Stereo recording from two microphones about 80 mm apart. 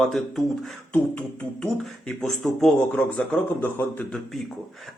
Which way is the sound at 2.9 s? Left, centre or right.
Centre.